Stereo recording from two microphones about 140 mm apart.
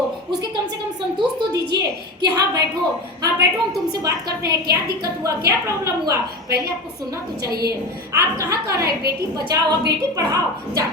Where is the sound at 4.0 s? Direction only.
25° right (ahead or behind).